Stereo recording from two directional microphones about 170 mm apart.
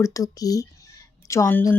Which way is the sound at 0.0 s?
20° left (ahead or behind).